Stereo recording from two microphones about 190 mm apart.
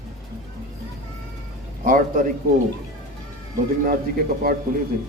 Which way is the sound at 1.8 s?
45° right (ahead or behind).